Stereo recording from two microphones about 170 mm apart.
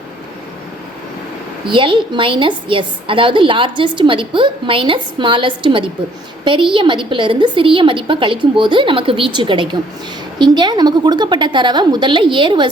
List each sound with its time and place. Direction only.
1.6 s a woman's voice: 30° right (ahead or behind)